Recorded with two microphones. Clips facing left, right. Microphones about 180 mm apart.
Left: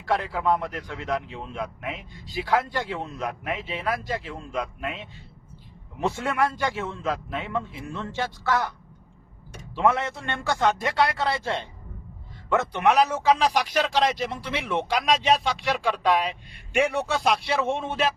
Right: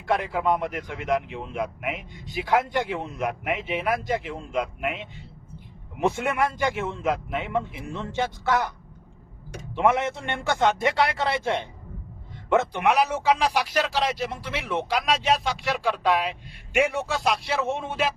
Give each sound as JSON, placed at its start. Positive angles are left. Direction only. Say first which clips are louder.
{"t": 0.0, "sound": "speech", "louder": "right 1 dB", "side_deg": -20}
{"t": 9.7, "sound": "speech", "louder": "right 1 dB", "side_deg": -20}
{"t": 12.5, "sound": "a man's voice", "louder": "even", "side_deg": -10}